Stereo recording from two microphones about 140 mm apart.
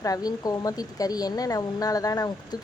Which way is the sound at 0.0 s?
25° left (ahead or behind).